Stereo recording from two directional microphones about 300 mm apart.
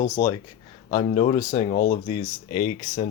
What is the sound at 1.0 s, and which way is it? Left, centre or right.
Speech, left.